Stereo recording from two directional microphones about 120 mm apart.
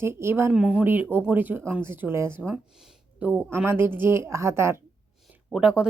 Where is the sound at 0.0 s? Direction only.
20° right (ahead or behind).